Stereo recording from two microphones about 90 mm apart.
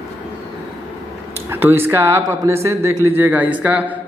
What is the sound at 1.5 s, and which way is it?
A man's voice, 25° right (ahead or behind).